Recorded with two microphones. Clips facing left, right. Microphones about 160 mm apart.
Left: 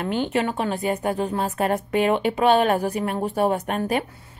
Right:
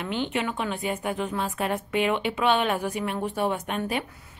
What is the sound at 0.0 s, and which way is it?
A woman's voice, 45° left (ahead or behind).